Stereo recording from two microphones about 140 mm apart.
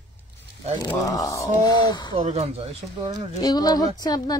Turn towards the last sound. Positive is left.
turn(degrees=30)  # may be behind; listen again after turning